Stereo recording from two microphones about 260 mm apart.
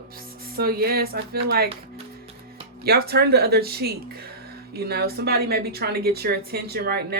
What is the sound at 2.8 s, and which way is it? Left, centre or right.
Speech, right.